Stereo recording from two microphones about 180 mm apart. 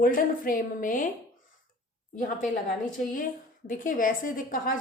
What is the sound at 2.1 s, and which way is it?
A woman's voice, 45° left (ahead or behind).